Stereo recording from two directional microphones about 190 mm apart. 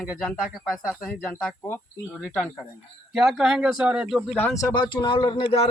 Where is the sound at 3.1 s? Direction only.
Centre (ahead or behind); by 5.4 s 20° left (ahead or behind).